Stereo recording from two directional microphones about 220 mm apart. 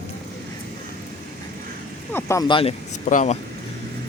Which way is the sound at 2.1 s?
15° left (ahead or behind).